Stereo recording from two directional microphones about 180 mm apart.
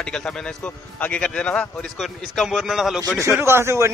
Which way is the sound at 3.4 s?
15° right (ahead or behind).